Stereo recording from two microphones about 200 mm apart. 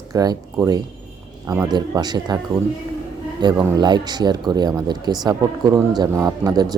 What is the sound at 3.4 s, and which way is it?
A man's voice, 20° right (ahead or behind).